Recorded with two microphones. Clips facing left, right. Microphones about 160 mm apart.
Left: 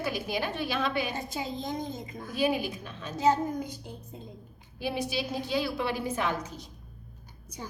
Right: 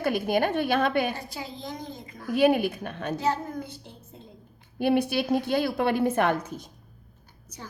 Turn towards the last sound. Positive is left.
turn(degrees=-55)  # may be behind; listen again after turning